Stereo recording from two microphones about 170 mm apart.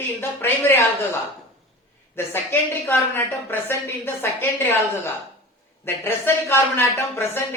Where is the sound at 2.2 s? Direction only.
15° left (ahead or behind).